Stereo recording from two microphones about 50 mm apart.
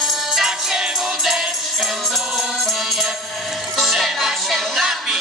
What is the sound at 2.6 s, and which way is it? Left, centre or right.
Music, centre.